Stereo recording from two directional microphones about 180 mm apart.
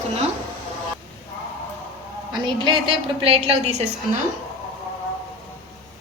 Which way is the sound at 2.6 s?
30° right (ahead or behind).